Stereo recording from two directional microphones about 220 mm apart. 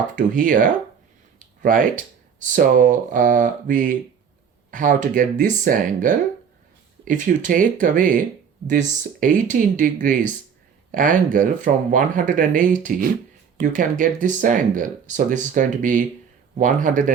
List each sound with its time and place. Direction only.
0.2 s speech: 40° right (ahead or behind)